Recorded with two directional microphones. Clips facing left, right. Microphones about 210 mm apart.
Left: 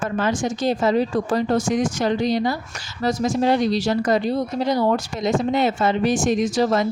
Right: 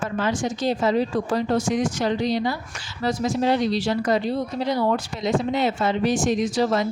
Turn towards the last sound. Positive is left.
turn(degrees=50)  # may be behind; listen again after turning